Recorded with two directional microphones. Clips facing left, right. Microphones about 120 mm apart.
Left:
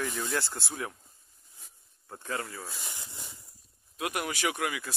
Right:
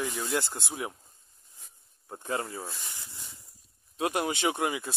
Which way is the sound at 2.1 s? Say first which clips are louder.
Right 3 dB; 20° right (ahead or behind).